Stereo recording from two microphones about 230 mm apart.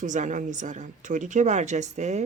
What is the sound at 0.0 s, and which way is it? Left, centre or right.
A woman's voice, right.